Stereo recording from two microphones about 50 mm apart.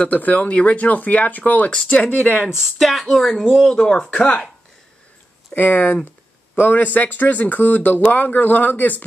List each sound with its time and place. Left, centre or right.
0.0 s speech: left
1.7 s speech: left
2.4 s speech: centre
2.8 s speech: centre
3.5 s speech: centre
5.5 s speech: left